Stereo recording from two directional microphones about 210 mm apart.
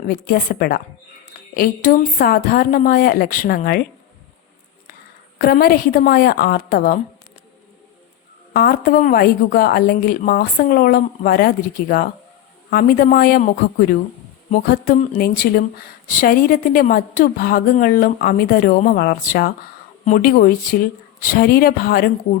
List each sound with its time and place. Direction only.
0.1 s a woman's voice: 45° left (ahead or behind)
5.4 s a woman's voice: 45° left (ahead or behind)
8.5 s a woman's voice: 45° left (ahead or behind)